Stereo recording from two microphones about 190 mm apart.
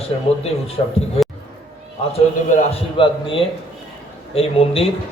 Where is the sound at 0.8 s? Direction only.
30° left (ahead or behind).